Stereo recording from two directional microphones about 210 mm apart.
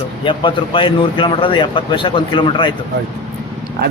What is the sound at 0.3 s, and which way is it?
A man's voice, 25° left (ahead or behind).